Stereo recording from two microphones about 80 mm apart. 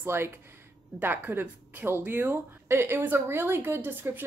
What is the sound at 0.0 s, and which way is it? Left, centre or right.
A woman's voice, right.